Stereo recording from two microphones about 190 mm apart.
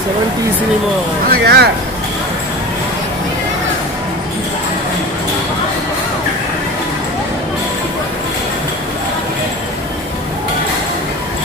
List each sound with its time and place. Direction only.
1.3 s speech: 60° right (ahead or behind)